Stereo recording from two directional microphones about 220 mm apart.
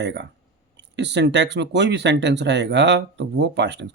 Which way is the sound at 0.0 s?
50° right (ahead or behind).